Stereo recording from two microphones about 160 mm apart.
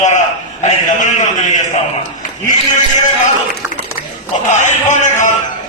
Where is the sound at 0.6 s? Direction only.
50° left (ahead or behind).